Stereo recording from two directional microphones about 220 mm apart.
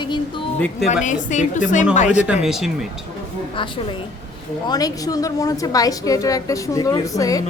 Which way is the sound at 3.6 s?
25° left (ahead or behind).